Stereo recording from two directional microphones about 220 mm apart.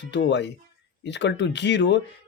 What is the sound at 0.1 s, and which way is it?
Speech, 50° left (ahead or behind).